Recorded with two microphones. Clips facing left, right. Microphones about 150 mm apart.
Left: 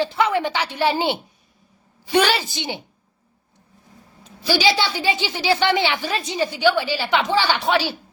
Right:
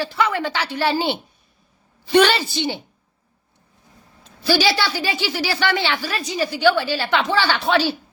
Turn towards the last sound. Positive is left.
turn(degrees=15)  # may be behind; listen again after turning